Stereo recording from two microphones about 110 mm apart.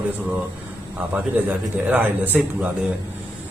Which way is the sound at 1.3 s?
15° right (ahead or behind).